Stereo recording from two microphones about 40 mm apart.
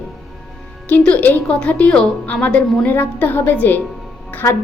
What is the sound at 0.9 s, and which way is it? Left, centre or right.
Speech, left.